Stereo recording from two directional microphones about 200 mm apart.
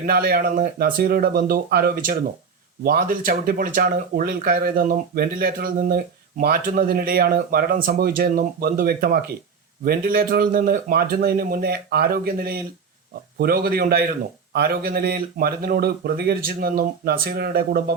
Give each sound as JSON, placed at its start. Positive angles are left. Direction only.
{"t": 0.0, "sound": "speech", "side_deg": -50}